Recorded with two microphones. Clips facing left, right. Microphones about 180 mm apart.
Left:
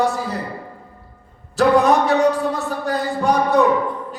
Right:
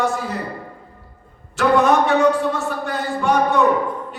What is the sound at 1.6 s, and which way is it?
A man's voice, 35° left (ahead or behind).